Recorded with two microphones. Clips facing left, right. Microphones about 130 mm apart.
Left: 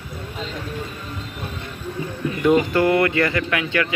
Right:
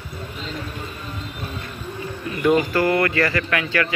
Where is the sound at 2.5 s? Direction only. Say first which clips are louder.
Left 2 dB; 20° left (ahead or behind).